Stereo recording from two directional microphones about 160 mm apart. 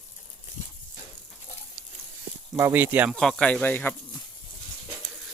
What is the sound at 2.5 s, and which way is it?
Speech, 15° right (ahead or behind).